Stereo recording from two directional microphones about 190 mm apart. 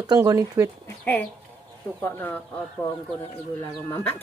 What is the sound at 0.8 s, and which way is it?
Speech, 10° left (ahead or behind).